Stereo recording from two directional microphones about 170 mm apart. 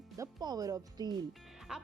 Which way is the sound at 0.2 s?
20° right (ahead or behind).